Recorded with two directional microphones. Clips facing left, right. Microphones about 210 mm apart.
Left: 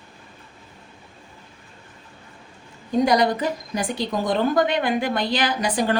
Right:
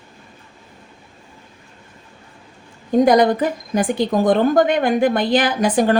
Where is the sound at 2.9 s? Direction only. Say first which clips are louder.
Right 6 dB; 50° right (ahead or behind).